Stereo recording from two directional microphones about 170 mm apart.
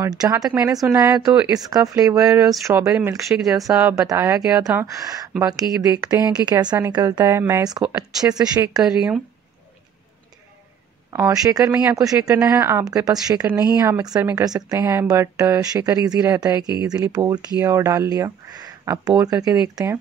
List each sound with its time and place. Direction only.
0.0 s a woman's voice: 20° right (ahead or behind)
2.2 s speech: 5° right (ahead or behind)
2.6 s a woman's voice: 20° right (ahead or behind)
3.7 s a woman's voice: 10° right (ahead or behind)
8.8 s speech: 5° right (ahead or behind)
11.1 s a woman's voice: 20° right (ahead or behind)